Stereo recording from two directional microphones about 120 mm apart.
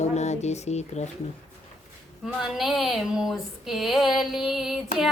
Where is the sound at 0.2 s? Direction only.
70° left (ahead or behind).